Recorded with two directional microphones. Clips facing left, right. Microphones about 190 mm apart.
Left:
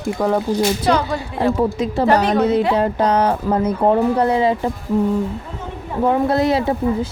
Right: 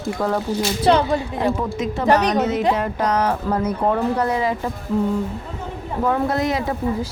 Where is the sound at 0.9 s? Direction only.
25° right (ahead or behind).